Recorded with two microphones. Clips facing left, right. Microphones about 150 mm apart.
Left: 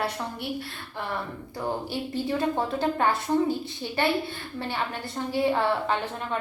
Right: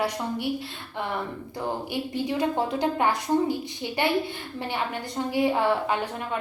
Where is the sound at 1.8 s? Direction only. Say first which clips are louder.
Right 1 dB; 15° right (ahead or behind).